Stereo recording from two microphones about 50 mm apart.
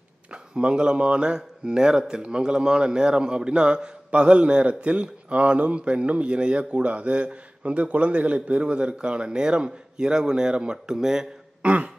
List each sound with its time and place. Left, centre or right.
0.3 s speech: right
11.6 s throat clearing: right